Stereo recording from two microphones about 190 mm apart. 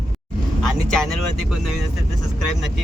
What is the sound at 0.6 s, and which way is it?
Speech, centre (ahead or behind).